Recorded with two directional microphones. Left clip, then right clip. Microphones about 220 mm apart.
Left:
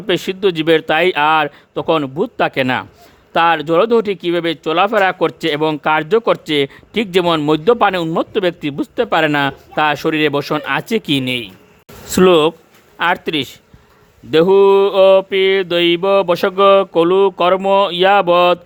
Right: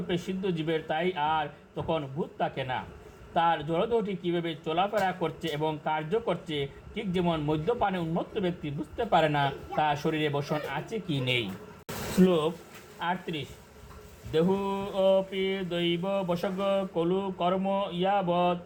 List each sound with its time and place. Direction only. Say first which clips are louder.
0.1 s speech: left 17 dB; 60° left (ahead or behind)
12.2 s speech: left 15 dB; 60° left (ahead or behind)